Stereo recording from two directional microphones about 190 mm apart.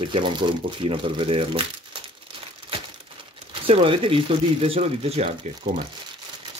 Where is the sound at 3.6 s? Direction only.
30° right (ahead or behind).